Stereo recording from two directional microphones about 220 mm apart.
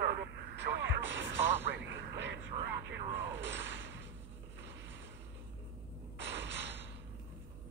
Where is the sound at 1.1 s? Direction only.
55° right (ahead or behind).